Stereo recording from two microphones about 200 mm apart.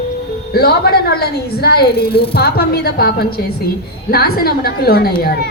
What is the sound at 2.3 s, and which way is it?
A woman's voice, 50° left (ahead or behind).